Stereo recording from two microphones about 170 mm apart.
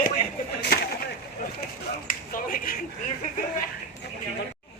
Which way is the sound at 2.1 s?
55° left (ahead or behind).